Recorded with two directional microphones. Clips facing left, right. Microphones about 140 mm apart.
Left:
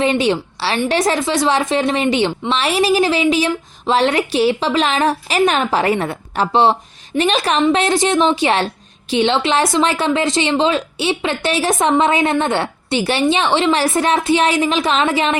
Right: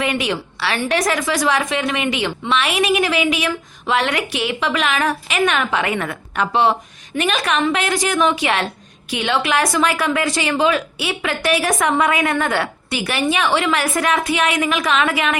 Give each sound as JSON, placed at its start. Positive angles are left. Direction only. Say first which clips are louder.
{"t": 0.0, "sound": "a woman's voice", "louder": "left 5 dB", "side_deg": 30}